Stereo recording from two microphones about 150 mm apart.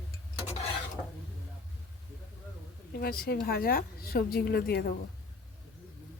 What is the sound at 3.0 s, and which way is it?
A woman's voice, 80° left.